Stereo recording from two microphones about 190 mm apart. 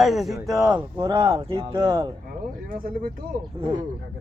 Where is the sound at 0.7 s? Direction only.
20° right (ahead or behind).